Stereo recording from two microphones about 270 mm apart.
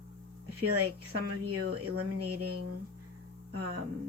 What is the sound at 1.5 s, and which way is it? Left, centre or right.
Speech, right.